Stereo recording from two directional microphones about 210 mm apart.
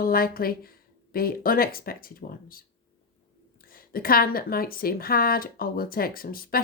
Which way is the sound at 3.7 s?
45° left (ahead or behind).